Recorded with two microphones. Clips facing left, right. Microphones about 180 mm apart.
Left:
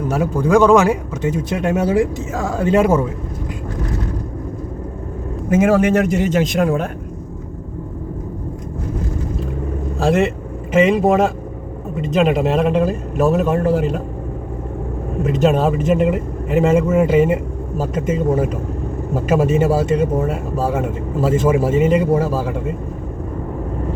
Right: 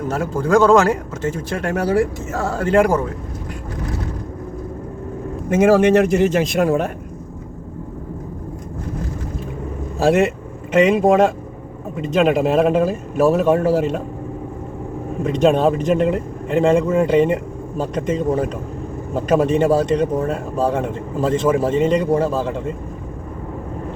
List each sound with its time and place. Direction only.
0.1 s speech: 15° left (ahead or behind)
5.5 s speech: centre (ahead or behind)
10.0 s speech: centre (ahead or behind)
15.2 s speech: 5° left (ahead or behind)